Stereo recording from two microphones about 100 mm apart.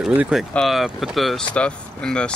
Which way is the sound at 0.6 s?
Centre (ahead or behind).